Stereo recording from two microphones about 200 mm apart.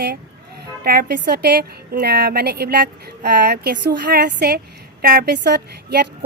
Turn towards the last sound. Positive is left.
turn(degrees=-55)  # may be behind; listen again after turning